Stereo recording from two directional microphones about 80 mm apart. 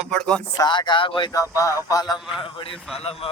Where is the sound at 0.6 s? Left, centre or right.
Left.